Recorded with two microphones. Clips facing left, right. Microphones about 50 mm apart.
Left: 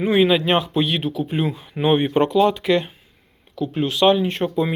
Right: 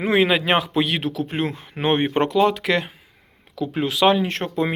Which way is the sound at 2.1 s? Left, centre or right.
Right.